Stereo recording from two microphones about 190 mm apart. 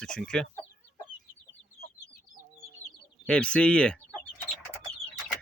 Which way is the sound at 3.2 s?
5° left (ahead or behind).